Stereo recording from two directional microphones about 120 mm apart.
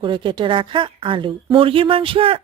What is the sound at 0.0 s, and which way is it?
Speech, 45° right (ahead or behind).